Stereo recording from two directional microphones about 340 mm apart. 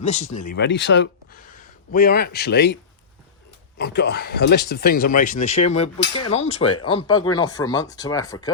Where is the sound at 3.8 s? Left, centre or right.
Left.